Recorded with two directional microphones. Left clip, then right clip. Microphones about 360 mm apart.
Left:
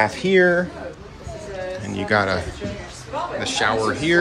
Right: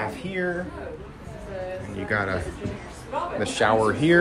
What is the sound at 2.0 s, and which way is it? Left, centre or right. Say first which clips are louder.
Speech: left 7 dB; centre.